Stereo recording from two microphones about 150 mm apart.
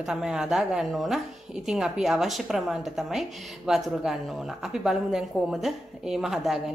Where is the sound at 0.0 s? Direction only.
5° right (ahead or behind).